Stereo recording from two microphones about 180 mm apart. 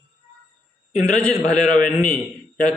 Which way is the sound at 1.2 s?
5° left (ahead or behind).